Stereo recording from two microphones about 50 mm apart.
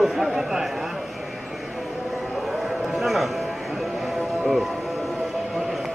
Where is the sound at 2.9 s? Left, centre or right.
Centre.